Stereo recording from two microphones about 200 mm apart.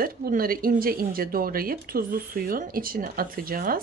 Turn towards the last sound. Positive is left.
turn(degrees=-45)  # may be behind; listen again after turning